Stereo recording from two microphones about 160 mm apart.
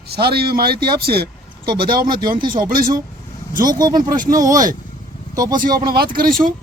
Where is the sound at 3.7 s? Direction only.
25° right (ahead or behind).